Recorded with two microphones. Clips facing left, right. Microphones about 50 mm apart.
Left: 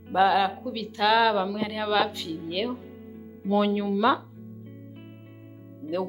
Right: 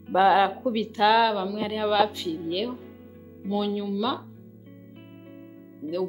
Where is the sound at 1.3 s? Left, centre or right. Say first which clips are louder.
Left 2 dB; centre.